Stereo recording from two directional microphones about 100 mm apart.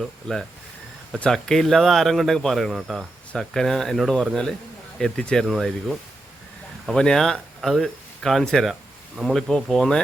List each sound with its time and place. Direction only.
0.0 s speech: centre (ahead or behind)